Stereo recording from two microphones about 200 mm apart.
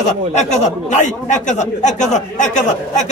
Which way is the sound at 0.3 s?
35° left (ahead or behind).